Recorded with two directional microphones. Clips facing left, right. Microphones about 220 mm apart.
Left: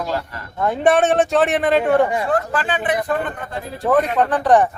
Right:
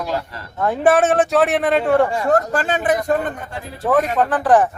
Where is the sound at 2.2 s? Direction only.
45° right (ahead or behind).